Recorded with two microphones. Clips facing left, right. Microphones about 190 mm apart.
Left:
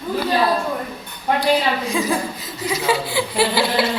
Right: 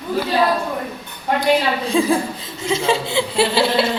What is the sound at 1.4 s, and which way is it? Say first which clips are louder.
Speech: right 2 dB; 30° right (ahead or behind).